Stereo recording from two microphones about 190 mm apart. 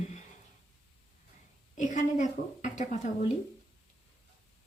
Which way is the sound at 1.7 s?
40° left (ahead or behind).